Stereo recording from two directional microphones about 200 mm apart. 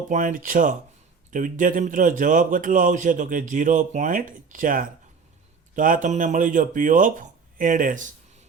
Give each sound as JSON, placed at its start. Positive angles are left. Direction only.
{"t": 0.1, "sound": "a man's voice", "side_deg": -40}